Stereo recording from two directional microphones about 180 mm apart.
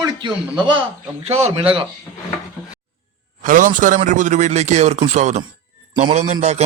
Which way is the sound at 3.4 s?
45° right (ahead or behind).